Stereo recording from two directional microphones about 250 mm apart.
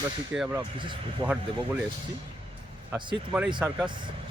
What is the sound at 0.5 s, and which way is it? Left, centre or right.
Speech, centre.